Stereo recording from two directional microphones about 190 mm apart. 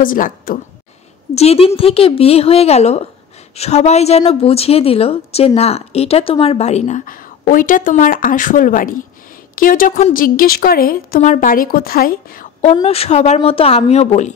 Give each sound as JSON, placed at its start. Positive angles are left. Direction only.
{"t": 0.0, "sound": "a woman's voice", "side_deg": 45}
{"t": 1.3, "sound": "a woman's voice", "side_deg": 35}
{"t": 12.8, "sound": "a woman's voice", "side_deg": 30}